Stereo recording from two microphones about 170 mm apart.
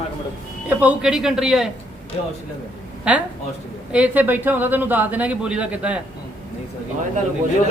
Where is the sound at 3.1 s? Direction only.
10° right (ahead or behind).